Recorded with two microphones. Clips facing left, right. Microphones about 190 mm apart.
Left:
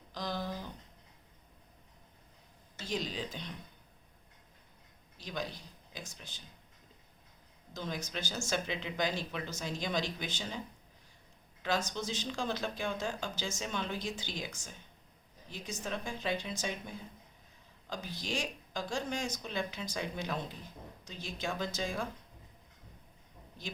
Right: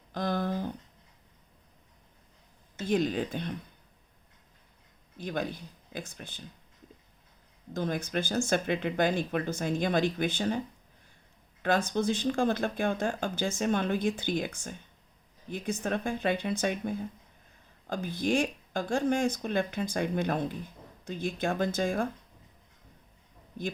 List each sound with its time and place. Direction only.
0.1 s a sound: 55° right (ahead or behind)
2.7 s speech: 55° right (ahead or behind)
5.1 s speech: 55° right (ahead or behind)
7.7 s speech: 55° right (ahead or behind)
11.9 s speech: 55° right (ahead or behind)